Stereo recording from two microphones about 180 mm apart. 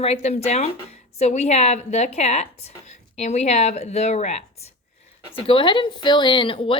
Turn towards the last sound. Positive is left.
turn(degrees=30)  # may be behind; listen again after turning